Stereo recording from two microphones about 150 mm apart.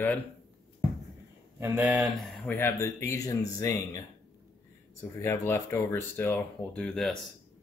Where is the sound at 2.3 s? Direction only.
10° left (ahead or behind).